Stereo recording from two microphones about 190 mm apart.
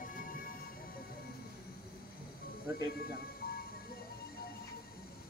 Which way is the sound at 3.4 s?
55° left (ahead or behind).